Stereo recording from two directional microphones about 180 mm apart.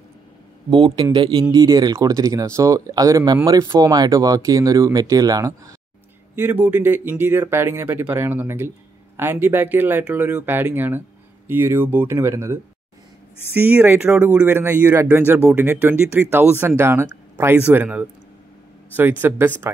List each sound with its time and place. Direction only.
0.7 s speech: 25° right (ahead or behind)
13.6 s speech: 10° right (ahead or behind)